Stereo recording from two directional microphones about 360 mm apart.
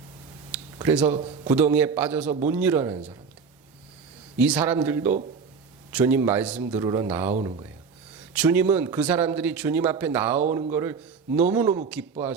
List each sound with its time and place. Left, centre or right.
0.8 s speech: centre
1.1 s a man's voice: centre
1.5 s speech: centre
4.4 s speech: centre
7.3 s a man's voice: centre
8.3 s a man's voice: centre